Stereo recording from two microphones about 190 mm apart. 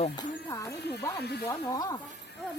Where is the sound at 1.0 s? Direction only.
15° left (ahead or behind).